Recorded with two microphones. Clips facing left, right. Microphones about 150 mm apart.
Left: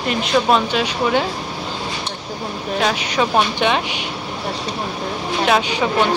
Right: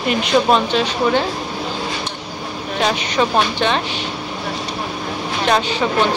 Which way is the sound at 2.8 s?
5° left (ahead or behind).